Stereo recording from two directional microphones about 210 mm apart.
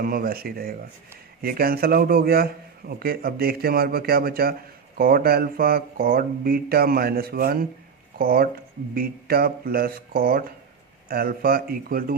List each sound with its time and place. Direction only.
0.0 s a man's voice: 45° right (ahead or behind)